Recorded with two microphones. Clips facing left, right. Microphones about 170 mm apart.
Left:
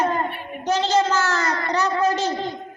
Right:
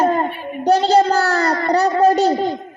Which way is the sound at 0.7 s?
35° right (ahead or behind).